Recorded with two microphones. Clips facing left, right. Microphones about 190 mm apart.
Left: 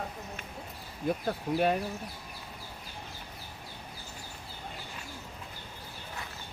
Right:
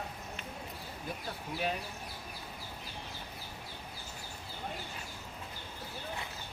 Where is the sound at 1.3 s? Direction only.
50° left (ahead or behind).